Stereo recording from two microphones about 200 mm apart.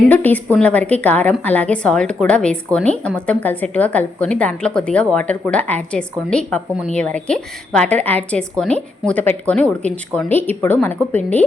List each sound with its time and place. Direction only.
0.1 s a woman's voice: 10° left (ahead or behind)